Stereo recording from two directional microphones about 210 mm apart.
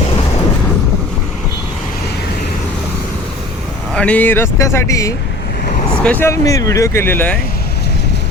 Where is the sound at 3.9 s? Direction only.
5° left (ahead or behind).